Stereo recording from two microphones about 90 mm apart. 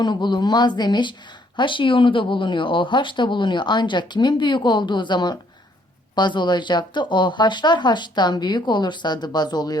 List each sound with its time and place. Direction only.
0.0 s speech: 55° left (ahead or behind)
1.5 s speech: 65° left (ahead or behind); by 9.7 s 50° left (ahead or behind)